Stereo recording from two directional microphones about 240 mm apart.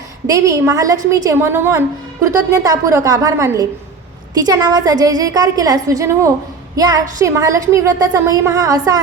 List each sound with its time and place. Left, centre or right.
0.3 s a woman's voice: centre